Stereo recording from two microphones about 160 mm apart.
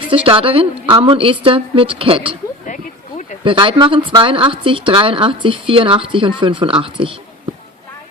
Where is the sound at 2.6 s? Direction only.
50° left (ahead or behind).